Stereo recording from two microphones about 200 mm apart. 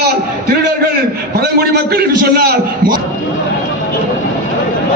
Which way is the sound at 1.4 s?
50° right (ahead or behind).